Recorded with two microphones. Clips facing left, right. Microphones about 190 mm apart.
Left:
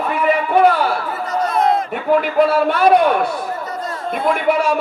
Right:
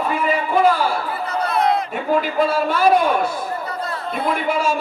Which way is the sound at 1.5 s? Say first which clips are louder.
Left 2 dB; 45° left (ahead or behind).